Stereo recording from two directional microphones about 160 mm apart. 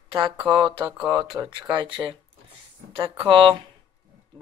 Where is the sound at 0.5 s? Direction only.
30° right (ahead or behind).